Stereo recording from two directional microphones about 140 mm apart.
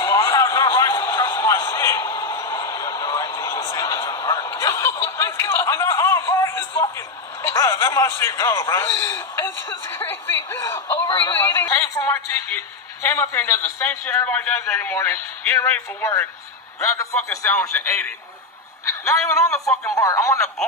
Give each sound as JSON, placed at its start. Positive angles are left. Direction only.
{"t": 0.0, "sound": "a sound", "side_deg": 20}
{"t": 7.4, "sound": "a man's voice", "side_deg": 20}
{"t": 19.0, "sound": "a man's voice", "side_deg": 20}
{"t": 19.5, "sound": "speech", "side_deg": 5}
{"t": 20.0, "sound": "a man's voice", "side_deg": 25}